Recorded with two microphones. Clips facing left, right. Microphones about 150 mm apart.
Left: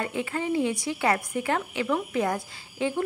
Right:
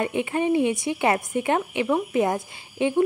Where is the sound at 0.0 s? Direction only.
20° right (ahead or behind).